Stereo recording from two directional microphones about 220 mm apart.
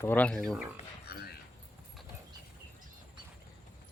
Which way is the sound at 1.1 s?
45° left (ahead or behind).